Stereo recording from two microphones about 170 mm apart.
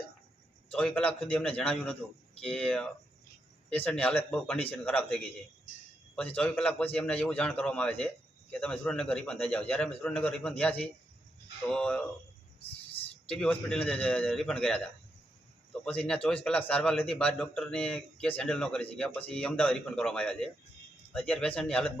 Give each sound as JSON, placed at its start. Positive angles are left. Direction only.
{"t": 0.7, "sound": "a man's voice", "side_deg": 5}
{"t": 12.5, "sound": "a sound", "side_deg": 35}
{"t": 13.2, "sound": "a man's voice", "side_deg": 5}